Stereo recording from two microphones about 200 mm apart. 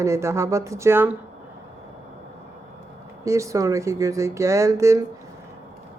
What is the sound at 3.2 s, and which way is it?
A woman's voice, 15° right (ahead or behind).